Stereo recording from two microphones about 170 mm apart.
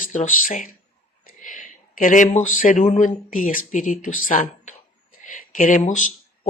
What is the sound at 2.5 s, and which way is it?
Speech, 50° left (ahead or behind).